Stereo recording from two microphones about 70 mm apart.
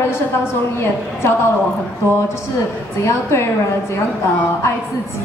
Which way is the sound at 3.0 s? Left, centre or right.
Left.